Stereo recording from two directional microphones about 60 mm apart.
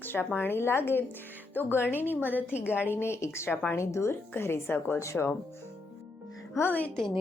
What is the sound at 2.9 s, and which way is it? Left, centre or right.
Speech, left.